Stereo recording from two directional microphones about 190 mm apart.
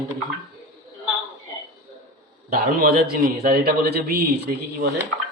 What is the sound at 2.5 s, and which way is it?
A man's voice, 50° right (ahead or behind).